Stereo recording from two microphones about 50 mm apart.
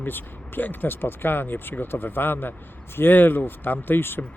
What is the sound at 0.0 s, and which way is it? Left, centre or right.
Speech, left.